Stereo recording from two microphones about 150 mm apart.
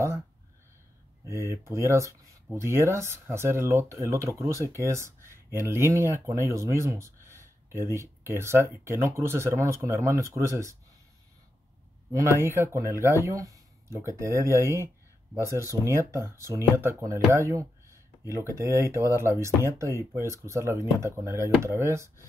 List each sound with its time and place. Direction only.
1.2 s speech: 20° right (ahead or behind)
12.1 s speech: 20° right (ahead or behind)